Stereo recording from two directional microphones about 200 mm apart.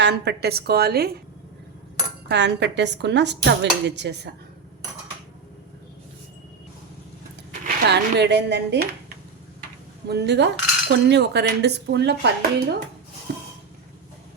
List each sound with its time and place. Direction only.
0.0 s a woman's voice: 55° right (ahead or behind)
2.2 s cutlery: 60° right (ahead or behind)
7.9 s cutlery: 60° right (ahead or behind)
13.3 s a sound: 45° right (ahead or behind)